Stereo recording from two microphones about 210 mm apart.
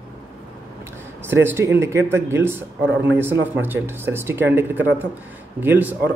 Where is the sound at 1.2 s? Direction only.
10° right (ahead or behind).